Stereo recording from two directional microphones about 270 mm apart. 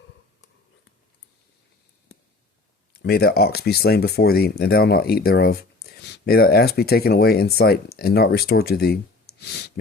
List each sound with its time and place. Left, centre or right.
3.0 s speech: left
9.4 s clicking: left